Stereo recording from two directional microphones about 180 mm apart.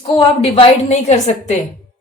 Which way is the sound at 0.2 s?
30° left (ahead or behind).